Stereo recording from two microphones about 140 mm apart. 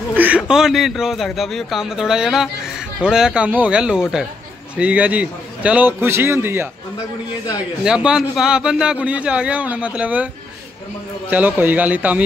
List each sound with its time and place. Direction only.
0.1 s a sound: 10° right (ahead or behind)
0.4 s a man's voice: 5° right (ahead or behind)
7.8 s a man's voice: 5° right (ahead or behind)